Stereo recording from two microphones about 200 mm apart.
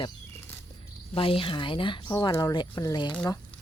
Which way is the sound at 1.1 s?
25° left (ahead or behind).